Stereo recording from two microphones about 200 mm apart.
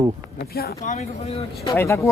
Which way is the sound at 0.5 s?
50° left (ahead or behind).